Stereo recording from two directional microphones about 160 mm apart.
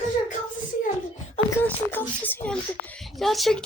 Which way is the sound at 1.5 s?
15° left (ahead or behind).